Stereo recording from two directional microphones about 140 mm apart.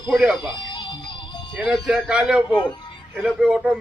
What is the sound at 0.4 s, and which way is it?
Music, 35° left (ahead or behind).